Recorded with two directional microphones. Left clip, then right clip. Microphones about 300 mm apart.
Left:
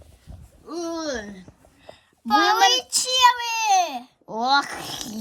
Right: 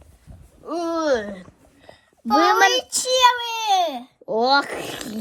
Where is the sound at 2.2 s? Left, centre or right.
Centre.